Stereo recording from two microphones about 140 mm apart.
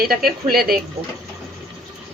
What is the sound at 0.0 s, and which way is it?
Speech, 90° right.